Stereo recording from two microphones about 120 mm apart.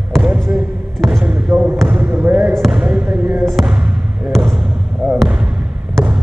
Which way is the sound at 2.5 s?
Centre (ahead or behind).